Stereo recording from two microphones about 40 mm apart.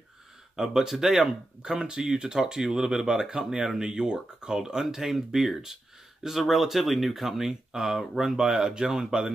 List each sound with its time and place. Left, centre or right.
0.6 s speech: centre
1.6 s speech: right
3.4 s speech: centre
8.5 s speech: centre